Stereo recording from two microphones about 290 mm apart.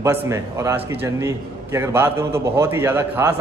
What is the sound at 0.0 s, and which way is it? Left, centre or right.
A man's voice, centre.